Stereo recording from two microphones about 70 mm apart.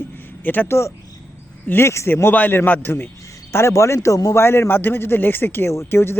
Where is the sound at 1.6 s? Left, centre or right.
Left.